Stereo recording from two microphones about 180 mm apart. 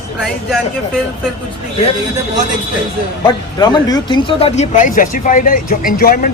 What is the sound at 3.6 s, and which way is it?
Speech, 20° left (ahead or behind).